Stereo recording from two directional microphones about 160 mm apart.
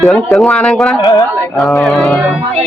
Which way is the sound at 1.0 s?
20° left (ahead or behind).